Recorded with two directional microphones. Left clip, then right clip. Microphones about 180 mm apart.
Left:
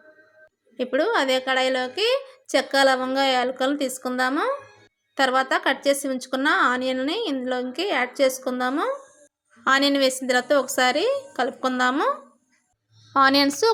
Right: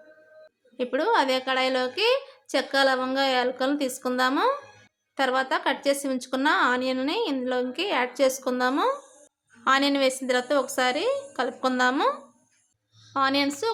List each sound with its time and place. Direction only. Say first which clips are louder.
0.8 s a woman's voice: left 1 dB; 15° left (ahead or behind)
9.6 s a woman's voice: left 2 dB; 15° left (ahead or behind)
13.1 s a woman's voice: left 6 dB; 30° left (ahead or behind)